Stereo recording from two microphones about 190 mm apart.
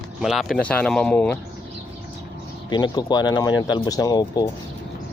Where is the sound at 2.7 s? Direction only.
20° left (ahead or behind).